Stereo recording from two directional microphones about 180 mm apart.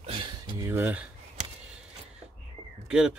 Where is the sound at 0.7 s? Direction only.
10° right (ahead or behind).